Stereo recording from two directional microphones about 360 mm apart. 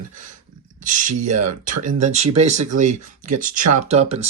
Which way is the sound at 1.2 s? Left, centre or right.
Right.